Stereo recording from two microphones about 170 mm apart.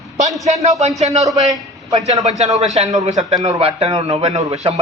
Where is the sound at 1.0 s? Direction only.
40° right (ahead or behind).